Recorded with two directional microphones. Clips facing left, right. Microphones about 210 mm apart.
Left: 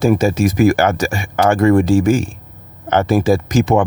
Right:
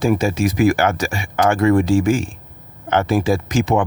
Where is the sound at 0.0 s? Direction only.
40° left (ahead or behind).